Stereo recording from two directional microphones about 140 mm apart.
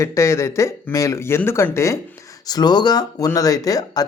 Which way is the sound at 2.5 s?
30° left (ahead or behind).